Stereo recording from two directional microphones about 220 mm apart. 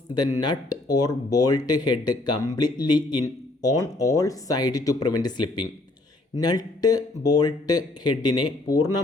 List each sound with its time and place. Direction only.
0.3 s speech: 20° left (ahead or behind)